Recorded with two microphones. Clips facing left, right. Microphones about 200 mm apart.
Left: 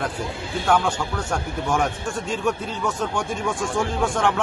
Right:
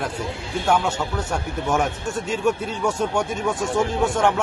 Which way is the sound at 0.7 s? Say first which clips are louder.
Even; 5° right (ahead or behind).